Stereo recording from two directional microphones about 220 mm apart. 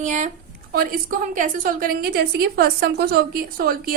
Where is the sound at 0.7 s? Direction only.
45° right (ahead or behind).